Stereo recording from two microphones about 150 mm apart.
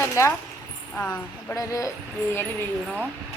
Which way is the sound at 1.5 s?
20° left (ahead or behind).